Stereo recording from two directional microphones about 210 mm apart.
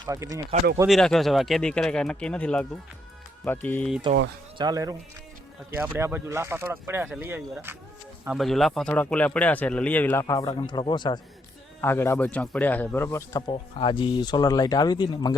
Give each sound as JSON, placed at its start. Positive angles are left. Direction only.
{"t": 0.0, "sound": "speech", "side_deg": -15}
{"t": 0.9, "sound": "speech", "side_deg": 0}
{"t": 4.5, "sound": "speech", "side_deg": -20}
{"t": 11.8, "sound": "speech", "side_deg": 10}
{"t": 13.5, "sound": "speech", "side_deg": 25}